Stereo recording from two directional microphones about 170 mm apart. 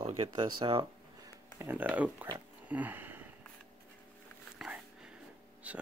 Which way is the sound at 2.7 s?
10° right (ahead or behind).